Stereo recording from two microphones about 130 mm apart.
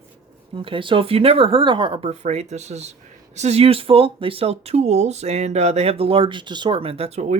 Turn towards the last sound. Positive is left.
turn(degrees=-60)  # may be behind; listen again after turning